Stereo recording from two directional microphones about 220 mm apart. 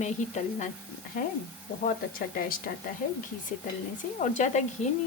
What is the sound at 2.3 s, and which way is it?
Speech, 40° left (ahead or behind).